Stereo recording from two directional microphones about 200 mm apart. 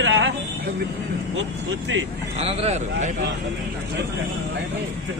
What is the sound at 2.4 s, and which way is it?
Speech, 30° right (ahead or behind).